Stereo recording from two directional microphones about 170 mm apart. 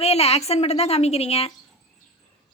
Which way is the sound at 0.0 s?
35° left (ahead or behind).